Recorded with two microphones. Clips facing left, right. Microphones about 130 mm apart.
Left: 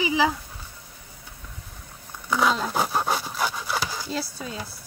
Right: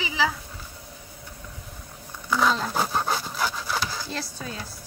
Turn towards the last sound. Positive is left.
turn(degrees=5)  # may be behind; listen again after turning